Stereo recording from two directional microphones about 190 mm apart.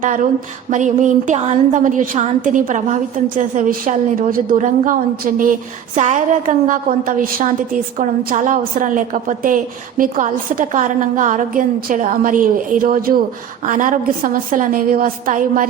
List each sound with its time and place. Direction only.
0.7 s a woman's voice: 40° right (ahead or behind)